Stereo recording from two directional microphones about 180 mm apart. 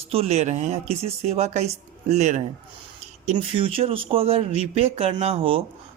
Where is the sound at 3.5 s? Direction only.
30° right (ahead or behind).